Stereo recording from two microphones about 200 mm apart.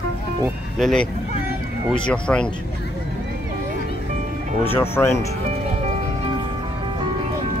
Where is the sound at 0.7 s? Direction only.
Centre (ahead or behind).